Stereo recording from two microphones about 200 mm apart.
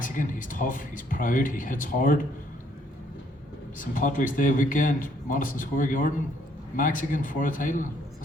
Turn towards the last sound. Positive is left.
turn(degrees=40)  # may be behind; listen again after turning